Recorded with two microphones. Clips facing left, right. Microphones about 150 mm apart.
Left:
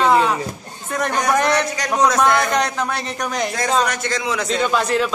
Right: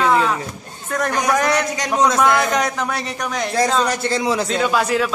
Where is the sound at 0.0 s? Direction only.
5° left (ahead or behind).